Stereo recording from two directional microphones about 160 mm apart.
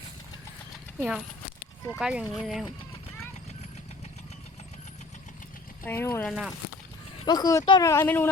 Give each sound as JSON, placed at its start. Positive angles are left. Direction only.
{"t": 0.9, "sound": "speech", "side_deg": -5}
{"t": 5.8, "sound": "speech", "side_deg": 15}
{"t": 6.2, "sound": "speech", "side_deg": 0}
{"t": 7.3, "sound": "speech", "side_deg": 25}